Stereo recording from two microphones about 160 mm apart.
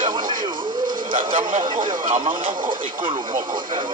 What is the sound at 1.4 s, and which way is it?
A man's voice, 55° right (ahead or behind).